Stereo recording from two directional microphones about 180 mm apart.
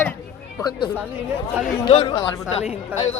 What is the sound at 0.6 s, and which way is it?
Speech, 25° left (ahead or behind).